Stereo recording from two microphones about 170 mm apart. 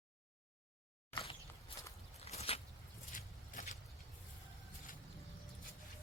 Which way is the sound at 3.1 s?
50° left (ahead or behind).